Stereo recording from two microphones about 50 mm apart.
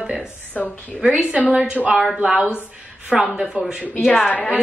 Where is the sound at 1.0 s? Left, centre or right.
Right.